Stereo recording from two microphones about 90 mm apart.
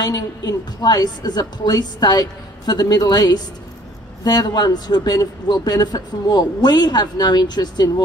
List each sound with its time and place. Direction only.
0.0 s speech: 45° left (ahead or behind)